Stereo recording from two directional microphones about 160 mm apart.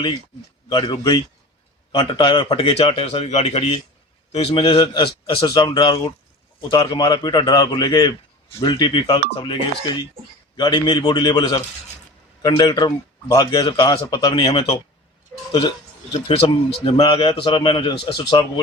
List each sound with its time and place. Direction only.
0.7 s a man's voice: 25° left (ahead or behind)
16.1 s a man's voice: 30° left (ahead or behind)